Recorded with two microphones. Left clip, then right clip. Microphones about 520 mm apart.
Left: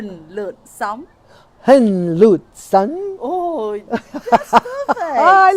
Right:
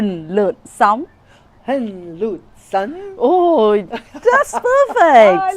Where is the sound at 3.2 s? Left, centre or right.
Right.